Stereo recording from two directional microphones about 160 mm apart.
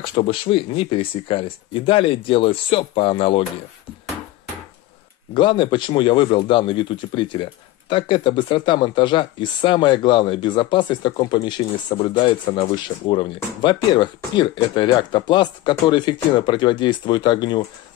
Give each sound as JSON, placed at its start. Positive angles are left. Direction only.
{"t": 0.0, "sound": "speech", "side_deg": 35}
{"t": 5.3, "sound": "speech", "side_deg": 30}